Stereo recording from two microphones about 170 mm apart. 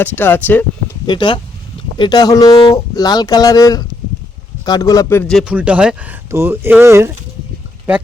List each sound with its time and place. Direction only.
0.0 s speech: 10° left (ahead or behind)
1.0 s speech: 30° left (ahead or behind); by 7.1 s 15° right (ahead or behind)